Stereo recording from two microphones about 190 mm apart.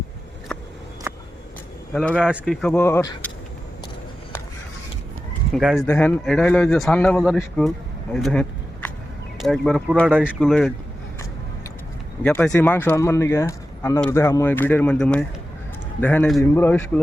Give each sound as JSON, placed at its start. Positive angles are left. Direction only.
{"t": 1.1, "sound": "a sound", "side_deg": -10}
{"t": 1.9, "sound": "speech", "side_deg": 5}
{"t": 2.1, "sound": "speech", "side_deg": -5}
{"t": 5.5, "sound": "speech", "side_deg": 0}
{"t": 12.2, "sound": "speech", "side_deg": 10}